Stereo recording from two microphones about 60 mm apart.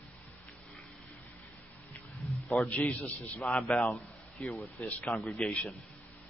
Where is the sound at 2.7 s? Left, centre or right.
Left.